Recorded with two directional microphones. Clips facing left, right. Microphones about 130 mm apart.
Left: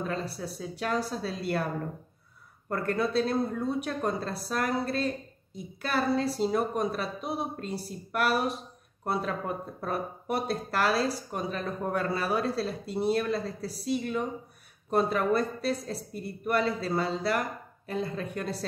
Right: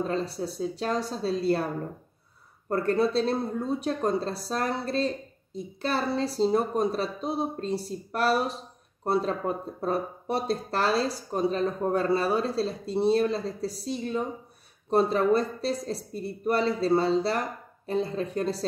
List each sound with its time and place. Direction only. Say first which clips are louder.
0.0 s speech: right 4 dB; 30° right (ahead or behind)
2.7 s speech: right 4 dB; 30° right (ahead or behind)